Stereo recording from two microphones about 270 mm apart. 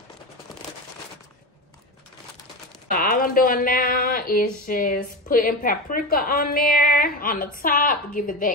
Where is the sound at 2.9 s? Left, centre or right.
Left.